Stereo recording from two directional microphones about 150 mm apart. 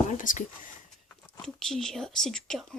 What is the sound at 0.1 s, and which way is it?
Speech, 60° left (ahead or behind).